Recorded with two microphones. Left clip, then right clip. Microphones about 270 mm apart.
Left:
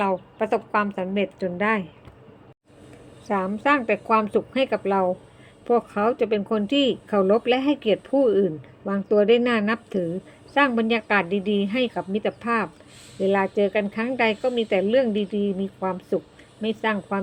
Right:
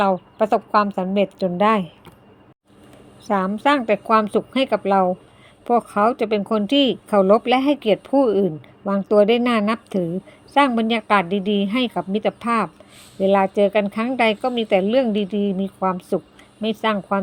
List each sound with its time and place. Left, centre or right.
0.0 s speech: right
3.2 s speech: right